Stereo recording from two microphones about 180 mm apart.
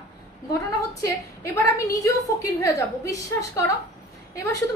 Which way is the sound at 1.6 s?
15° left (ahead or behind).